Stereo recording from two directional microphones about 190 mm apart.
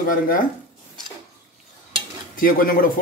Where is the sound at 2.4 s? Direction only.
50° left (ahead or behind).